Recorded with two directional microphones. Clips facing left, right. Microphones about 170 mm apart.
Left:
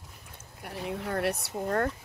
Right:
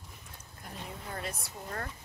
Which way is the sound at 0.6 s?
70° left (ahead or behind).